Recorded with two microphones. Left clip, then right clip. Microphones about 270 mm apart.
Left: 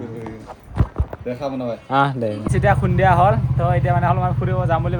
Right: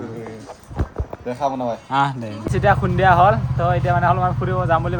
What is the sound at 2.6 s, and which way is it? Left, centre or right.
Speech, right.